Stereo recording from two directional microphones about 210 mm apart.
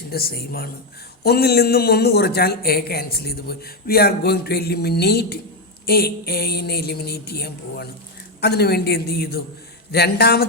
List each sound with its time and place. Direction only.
0.1 s a man's voice: 45° left (ahead or behind)